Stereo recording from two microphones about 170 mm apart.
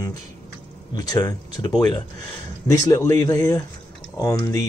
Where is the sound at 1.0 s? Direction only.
20° left (ahead or behind).